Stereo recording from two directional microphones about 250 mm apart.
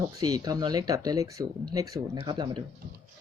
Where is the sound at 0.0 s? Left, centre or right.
Centre.